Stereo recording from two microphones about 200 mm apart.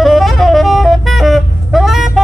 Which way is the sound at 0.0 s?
Centre (ahead or behind).